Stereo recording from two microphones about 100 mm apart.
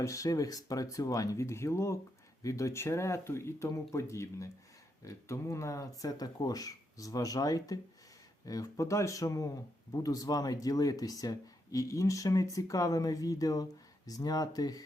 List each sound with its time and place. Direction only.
0.0 s speech: 35° left (ahead or behind)